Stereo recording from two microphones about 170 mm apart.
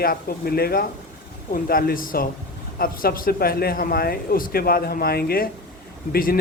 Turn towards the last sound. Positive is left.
turn(degrees=60)  # may be behind; listen again after turning